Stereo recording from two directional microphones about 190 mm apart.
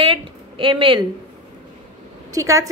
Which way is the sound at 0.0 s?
25° right (ahead or behind).